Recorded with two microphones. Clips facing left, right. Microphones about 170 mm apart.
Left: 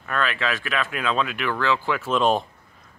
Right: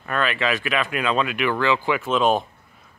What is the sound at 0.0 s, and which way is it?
Speech, 5° right (ahead or behind).